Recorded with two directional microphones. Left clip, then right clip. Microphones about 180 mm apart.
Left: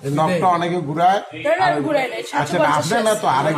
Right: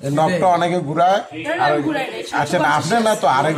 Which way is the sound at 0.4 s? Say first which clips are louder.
Right 2 dB; 60° right (ahead or behind).